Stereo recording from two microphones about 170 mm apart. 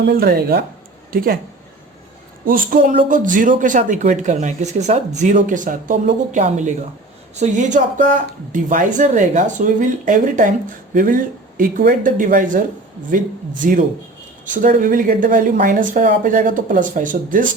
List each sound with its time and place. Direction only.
0.1 s speech: 65° right (ahead or behind)
2.4 s a man's voice: 55° right (ahead or behind)